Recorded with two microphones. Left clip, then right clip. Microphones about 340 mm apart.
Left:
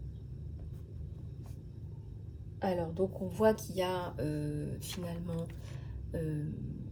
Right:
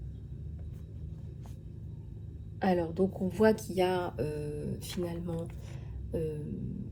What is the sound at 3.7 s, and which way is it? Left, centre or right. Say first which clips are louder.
Speech: right 5 dB; centre.